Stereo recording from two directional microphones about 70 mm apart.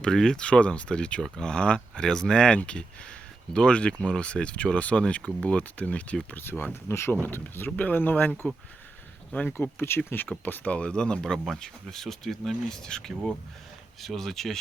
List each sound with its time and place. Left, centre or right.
0.0 s speech: centre
6.3 s speech: left
9.3 s speech: left
9.6 s speech: left; by 14.6 s centre